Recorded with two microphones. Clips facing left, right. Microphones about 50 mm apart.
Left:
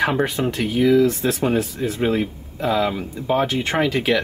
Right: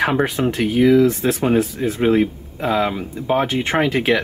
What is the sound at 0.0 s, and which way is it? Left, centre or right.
Speech, centre.